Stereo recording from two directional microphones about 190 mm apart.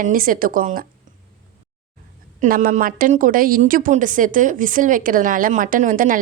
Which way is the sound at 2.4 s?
50° right (ahead or behind).